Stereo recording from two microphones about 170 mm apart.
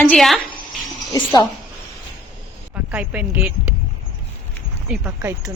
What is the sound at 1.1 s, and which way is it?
Speech, 20° left (ahead or behind).